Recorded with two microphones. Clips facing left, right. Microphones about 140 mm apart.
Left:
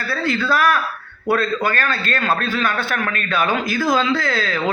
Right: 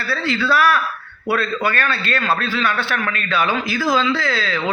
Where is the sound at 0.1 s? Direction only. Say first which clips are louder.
Right 1 dB; 45° left (ahead or behind).